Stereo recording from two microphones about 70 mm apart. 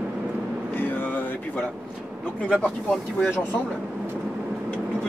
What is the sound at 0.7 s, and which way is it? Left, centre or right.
Vehicle, left.